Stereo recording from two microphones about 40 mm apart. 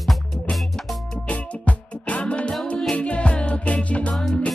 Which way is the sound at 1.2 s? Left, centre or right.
Left.